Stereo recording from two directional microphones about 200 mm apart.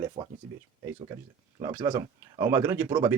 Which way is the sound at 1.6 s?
20° right (ahead or behind).